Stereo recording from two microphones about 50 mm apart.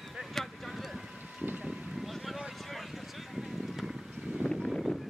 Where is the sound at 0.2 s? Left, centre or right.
Centre.